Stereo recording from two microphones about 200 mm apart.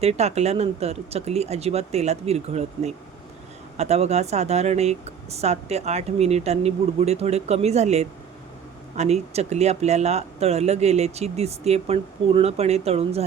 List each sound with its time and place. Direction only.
0.0 s speech: 35° right (ahead or behind)